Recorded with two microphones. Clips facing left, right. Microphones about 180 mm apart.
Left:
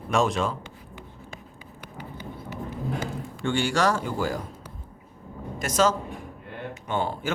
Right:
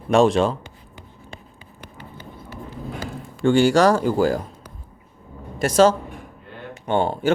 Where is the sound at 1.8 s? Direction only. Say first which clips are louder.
Left 1 dB; 15° left (ahead or behind).